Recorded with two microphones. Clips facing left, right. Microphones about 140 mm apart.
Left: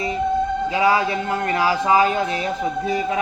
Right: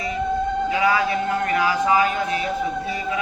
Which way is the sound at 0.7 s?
25° left (ahead or behind).